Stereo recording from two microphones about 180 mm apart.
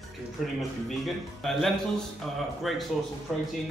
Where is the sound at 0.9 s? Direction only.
Centre (ahead or behind).